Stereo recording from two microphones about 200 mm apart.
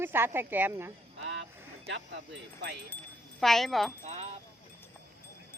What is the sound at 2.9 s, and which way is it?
Speech, centre (ahead or behind).